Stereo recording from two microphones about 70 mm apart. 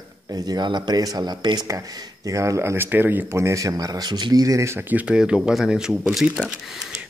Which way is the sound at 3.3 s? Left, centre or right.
Right.